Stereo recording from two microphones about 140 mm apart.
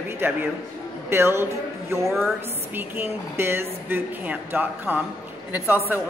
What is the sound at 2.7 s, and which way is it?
Speech, 15° right (ahead or behind).